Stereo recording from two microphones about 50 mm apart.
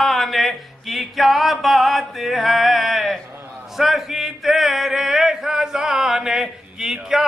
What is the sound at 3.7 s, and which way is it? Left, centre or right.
Male singing, centre.